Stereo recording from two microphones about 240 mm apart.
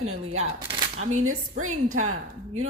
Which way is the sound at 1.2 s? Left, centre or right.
Right.